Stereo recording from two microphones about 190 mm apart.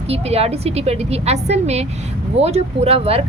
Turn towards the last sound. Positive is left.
turn(degrees=-30)  # may be behind; listen again after turning